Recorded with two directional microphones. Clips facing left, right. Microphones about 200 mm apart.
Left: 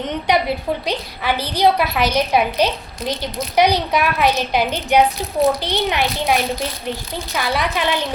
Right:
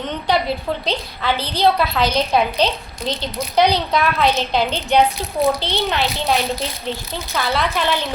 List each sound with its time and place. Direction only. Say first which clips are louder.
0.9 s a child's voice: even; 10° left (ahead or behind)